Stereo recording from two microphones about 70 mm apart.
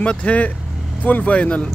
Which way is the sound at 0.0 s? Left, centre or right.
Centre.